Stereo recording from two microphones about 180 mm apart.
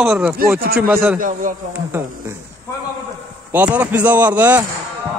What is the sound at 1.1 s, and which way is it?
Speech, 45° right (ahead or behind).